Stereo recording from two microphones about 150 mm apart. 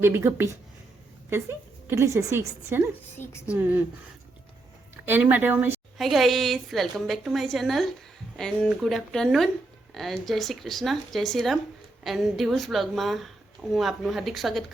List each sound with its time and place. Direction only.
0.0 s a woman's voice: 15° right (ahead or behind)
5.0 s a woman's voice: 15° right (ahead or behind)
6.0 s speech: centre (ahead or behind)